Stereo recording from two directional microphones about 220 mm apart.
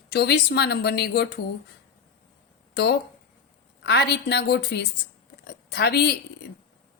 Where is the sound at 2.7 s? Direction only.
50° left (ahead or behind).